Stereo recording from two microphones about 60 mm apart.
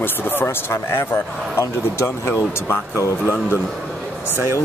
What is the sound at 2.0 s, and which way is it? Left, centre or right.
Speech, left.